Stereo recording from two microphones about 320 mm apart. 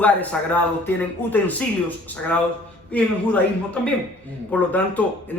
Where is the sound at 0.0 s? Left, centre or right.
Centre.